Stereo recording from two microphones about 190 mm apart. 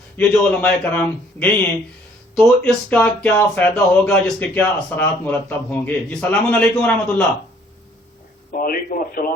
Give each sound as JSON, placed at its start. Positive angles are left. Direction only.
{"t": 0.2, "sound": "speech", "side_deg": 10}
{"t": 8.5, "sound": "speech", "side_deg": 50}